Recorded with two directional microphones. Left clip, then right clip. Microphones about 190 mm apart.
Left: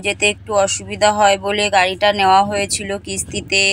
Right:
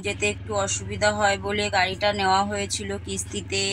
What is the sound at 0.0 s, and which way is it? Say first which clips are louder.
Speech: left 9 dB; 60° left (ahead or behind).